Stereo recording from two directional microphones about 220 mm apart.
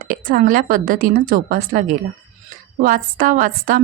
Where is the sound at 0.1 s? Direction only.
40° right (ahead or behind).